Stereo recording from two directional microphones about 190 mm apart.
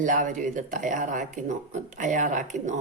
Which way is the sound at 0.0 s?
45° right (ahead or behind).